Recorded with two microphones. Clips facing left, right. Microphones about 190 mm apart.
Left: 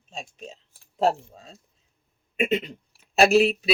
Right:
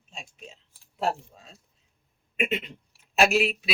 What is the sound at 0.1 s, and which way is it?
Speech, 40° left (ahead or behind).